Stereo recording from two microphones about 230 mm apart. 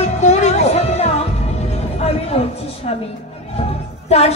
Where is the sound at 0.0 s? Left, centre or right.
Left.